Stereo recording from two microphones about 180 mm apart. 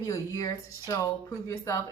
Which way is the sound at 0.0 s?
20° left (ahead or behind).